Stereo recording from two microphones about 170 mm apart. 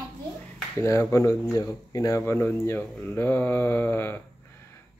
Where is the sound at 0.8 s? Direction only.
15° left (ahead or behind).